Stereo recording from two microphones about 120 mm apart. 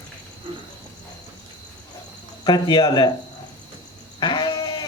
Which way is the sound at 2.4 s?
40° left (ahead or behind).